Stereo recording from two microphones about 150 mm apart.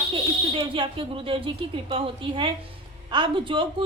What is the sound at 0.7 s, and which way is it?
A woman's voice, 35° right (ahead or behind).